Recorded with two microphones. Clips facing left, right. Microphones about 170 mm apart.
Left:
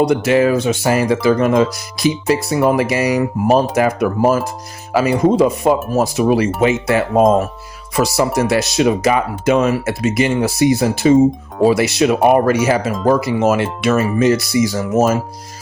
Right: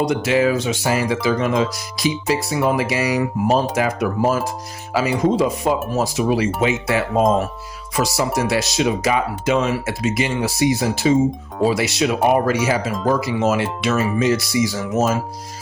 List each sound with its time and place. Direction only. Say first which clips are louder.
0.0 s speech: left 4 dB; 55° left (ahead or behind)